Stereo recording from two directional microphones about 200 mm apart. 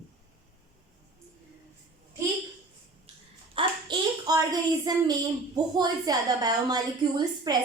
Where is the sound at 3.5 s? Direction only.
20° right (ahead or behind).